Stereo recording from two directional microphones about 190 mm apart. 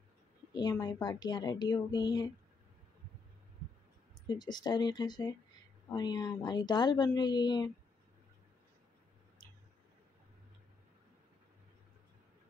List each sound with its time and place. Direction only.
0.5 s a woman's voice: 20° left (ahead or behind)
4.3 s a woman's voice: 20° left (ahead or behind)